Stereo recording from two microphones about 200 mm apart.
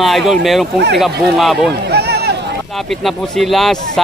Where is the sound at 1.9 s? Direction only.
55° right (ahead or behind).